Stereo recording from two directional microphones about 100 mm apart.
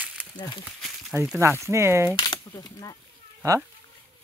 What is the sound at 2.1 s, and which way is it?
Typewriter, 55° left (ahead or behind).